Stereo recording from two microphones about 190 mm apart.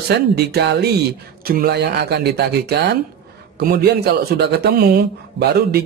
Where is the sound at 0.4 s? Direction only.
55° right (ahead or behind).